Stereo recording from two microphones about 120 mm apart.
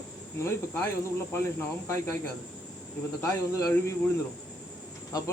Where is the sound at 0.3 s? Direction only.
20° left (ahead or behind).